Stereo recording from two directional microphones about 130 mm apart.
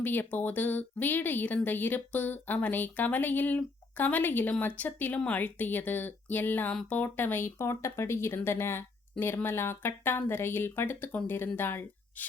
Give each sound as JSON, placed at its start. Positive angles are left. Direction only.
{"t": 0.0, "sound": "speech", "side_deg": 15}